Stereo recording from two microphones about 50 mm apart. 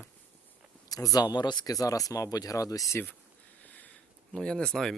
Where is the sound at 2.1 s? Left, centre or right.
Left.